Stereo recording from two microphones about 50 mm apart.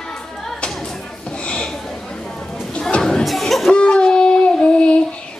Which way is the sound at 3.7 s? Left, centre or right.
Centre.